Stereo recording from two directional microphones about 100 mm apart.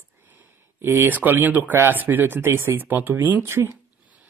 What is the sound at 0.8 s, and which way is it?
Speech, 20° right (ahead or behind).